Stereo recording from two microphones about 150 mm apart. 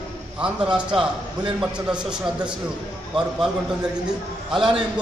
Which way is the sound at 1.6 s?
5° right (ahead or behind).